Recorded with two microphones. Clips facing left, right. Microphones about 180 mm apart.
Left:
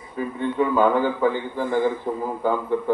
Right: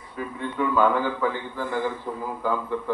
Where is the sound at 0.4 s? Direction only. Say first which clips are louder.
Left 3 dB; 25° left (ahead or behind).